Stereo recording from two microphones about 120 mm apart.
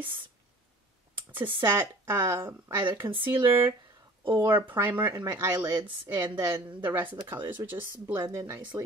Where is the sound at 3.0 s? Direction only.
40° right (ahead or behind).